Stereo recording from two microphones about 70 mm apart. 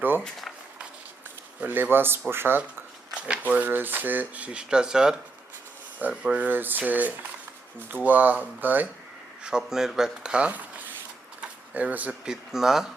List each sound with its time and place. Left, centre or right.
1.6 s speech: right
3.2 s a sound: centre
3.5 s speech: right
9.4 s speech: centre
11.3 s a sound: right
12.2 s speech: centre